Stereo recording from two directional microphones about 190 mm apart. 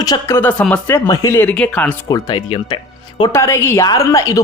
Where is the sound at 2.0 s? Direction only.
20° left (ahead or behind).